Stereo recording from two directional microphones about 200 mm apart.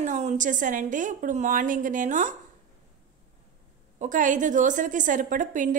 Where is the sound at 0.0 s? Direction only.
35° right (ahead or behind).